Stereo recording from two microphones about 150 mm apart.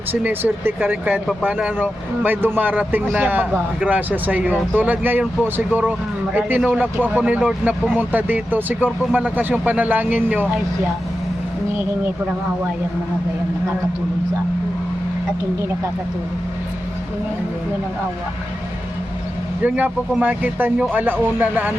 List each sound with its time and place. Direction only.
0.1 s speech: 10° right (ahead or behind)
19.6 s speech: 10° right (ahead or behind)